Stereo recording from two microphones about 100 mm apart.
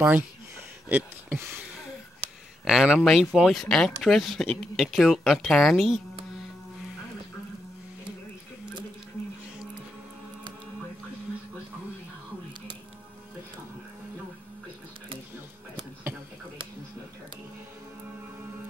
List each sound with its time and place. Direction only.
0.8 s speech: 15° right (ahead or behind)
2.6 s speech: 5° right (ahead or behind)